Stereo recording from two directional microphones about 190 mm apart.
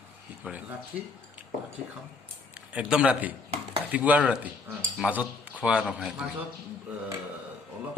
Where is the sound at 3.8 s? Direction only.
10° right (ahead or behind).